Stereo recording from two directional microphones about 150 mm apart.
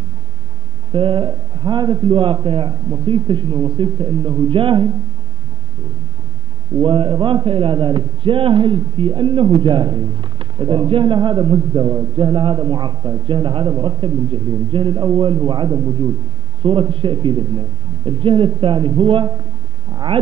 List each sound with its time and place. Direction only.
0.9 s a man's voice: 35° right (ahead or behind)
6.8 s a man's voice: 35° right (ahead or behind)